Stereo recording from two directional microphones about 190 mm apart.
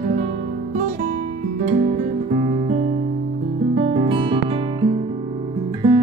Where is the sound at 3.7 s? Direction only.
35° right (ahead or behind).